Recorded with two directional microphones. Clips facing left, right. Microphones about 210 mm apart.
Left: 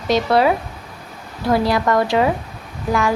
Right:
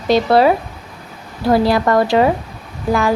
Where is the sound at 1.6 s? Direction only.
35° right (ahead or behind).